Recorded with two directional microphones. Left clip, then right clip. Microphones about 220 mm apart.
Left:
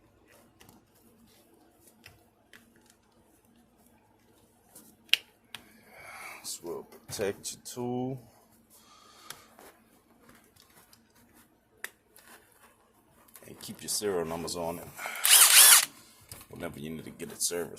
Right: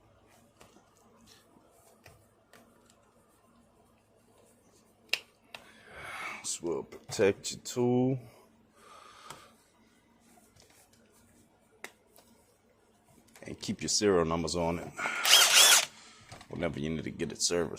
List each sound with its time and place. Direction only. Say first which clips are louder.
5.9 s speech: right 5 dB; 40° right (ahead or behind)
8.9 s a sound: right 4 dB; 35° right (ahead or behind)
13.4 s speech: right 6 dB; 40° right (ahead or behind)
15.3 s drill: left 1 dB; centre (ahead or behind)
16.6 s speech: right 5 dB; 40° right (ahead or behind)